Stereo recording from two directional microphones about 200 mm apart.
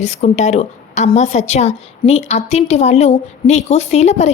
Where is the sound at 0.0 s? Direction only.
35° left (ahead or behind).